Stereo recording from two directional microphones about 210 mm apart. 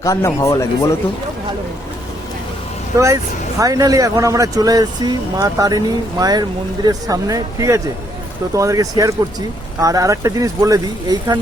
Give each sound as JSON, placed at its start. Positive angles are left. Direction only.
{"t": 0.0, "sound": "speech", "side_deg": 15}
{"t": 3.6, "sound": "speech", "side_deg": -15}